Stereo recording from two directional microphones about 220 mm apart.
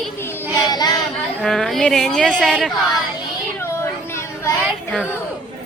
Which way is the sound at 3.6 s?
10° left (ahead or behind).